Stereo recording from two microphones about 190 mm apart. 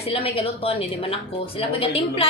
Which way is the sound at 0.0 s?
30° left (ahead or behind).